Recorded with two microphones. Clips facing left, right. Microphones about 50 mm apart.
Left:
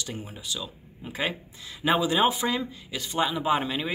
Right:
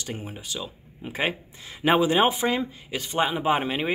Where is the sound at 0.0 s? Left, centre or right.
Right.